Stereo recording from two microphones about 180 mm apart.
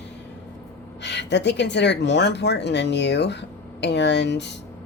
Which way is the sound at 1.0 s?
75° left (ahead or behind).